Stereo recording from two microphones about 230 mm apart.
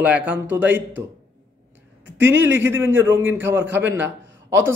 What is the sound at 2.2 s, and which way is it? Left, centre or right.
Speech, right.